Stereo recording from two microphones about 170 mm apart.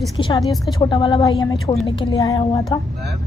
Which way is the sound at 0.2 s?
30° left (ahead or behind).